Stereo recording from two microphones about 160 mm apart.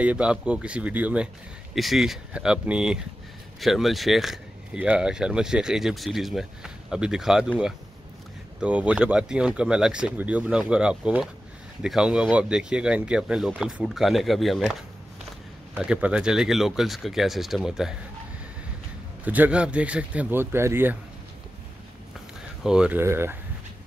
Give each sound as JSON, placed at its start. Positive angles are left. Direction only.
{"t": 0.0, "sound": "speech", "side_deg": -5}
{"t": 8.5, "sound": "speech", "side_deg": -10}
{"t": 19.2, "sound": "speech", "side_deg": -10}
{"t": 22.6, "sound": "speech", "side_deg": -5}